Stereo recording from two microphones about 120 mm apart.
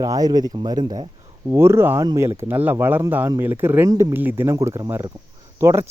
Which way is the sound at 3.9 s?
30° right (ahead or behind).